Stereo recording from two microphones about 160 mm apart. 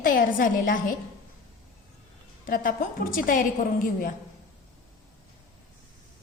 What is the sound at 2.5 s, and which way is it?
A woman's voice, 60° left (ahead or behind).